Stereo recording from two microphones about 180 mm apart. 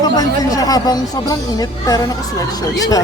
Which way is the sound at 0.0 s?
20° left (ahead or behind).